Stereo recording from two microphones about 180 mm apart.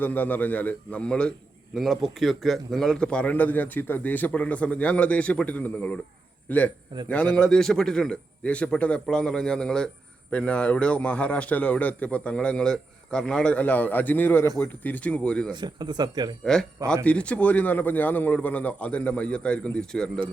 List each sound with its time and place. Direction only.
0.0 s a man's voice: 10° left (ahead or behind)
15.6 s speech: 25° right (ahead or behind)
16.4 s a man's voice: 5° left (ahead or behind)